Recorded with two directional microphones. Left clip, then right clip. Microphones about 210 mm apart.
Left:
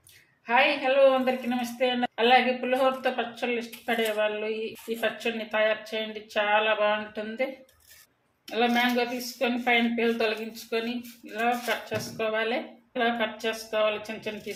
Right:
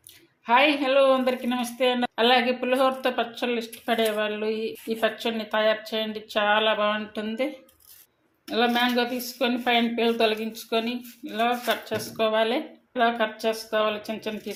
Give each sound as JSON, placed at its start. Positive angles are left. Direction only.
{"t": 0.4, "sound": "speech", "side_deg": -40}
{"t": 8.4, "sound": "speech", "side_deg": -35}